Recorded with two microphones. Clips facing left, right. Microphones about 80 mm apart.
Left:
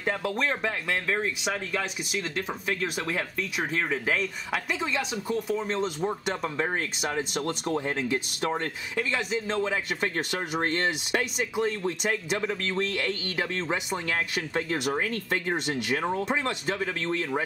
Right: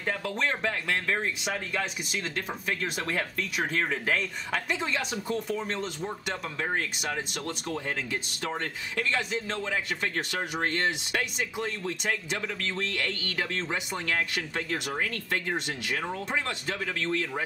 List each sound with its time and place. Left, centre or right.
0.0 s speech: centre
3.0 s speech: centre
5.6 s speech: left
7.4 s speech: left
8.0 s speech: left
16.0 s speech: left
16.3 s speech: centre